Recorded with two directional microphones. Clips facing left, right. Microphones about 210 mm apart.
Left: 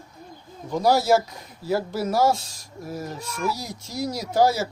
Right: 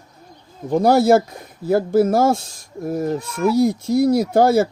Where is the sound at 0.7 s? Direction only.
55° right (ahead or behind).